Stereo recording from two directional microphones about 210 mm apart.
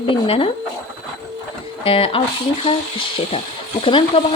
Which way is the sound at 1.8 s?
25° left (ahead or behind).